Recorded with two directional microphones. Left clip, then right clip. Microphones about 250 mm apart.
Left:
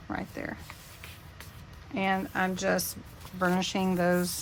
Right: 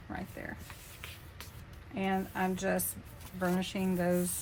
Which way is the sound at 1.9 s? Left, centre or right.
Left.